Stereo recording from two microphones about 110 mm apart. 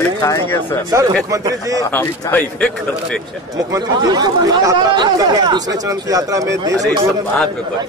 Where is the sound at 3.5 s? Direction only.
35° right (ahead or behind).